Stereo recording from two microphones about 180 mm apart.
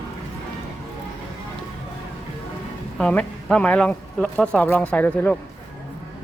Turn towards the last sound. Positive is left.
turn(degrees=10)  # may be behind; listen again after turning